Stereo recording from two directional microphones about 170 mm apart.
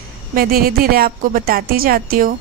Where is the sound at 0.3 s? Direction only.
60° right (ahead or behind).